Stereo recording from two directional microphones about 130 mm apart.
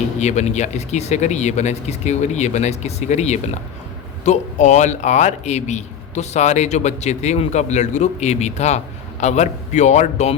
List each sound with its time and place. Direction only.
0.2 s a man's voice: 60° left (ahead or behind)